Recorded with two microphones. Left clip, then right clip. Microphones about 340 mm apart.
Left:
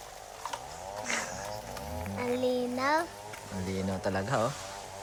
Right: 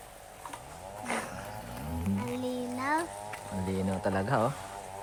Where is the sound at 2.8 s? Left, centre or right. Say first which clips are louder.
Left 1 dB; left.